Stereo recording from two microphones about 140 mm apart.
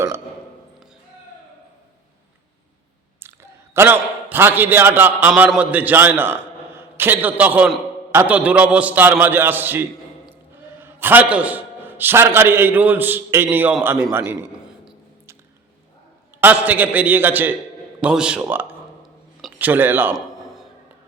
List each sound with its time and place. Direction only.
3.8 s a man's voice: 15° right (ahead or behind)
16.4 s a man's voice: 10° right (ahead or behind)
20.1 s a sound: centre (ahead or behind)